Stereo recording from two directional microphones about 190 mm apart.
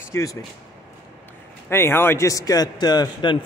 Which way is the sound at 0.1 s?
15° left (ahead or behind).